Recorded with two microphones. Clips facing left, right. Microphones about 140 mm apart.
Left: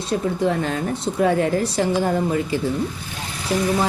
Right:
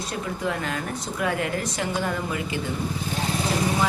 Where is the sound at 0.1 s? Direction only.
30° left (ahead or behind).